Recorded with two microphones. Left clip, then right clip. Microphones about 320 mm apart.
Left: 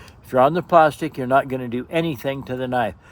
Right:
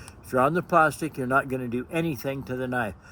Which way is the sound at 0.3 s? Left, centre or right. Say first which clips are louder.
Left 6 dB; centre.